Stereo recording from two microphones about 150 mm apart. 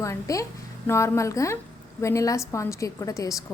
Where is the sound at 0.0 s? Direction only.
20° left (ahead or behind).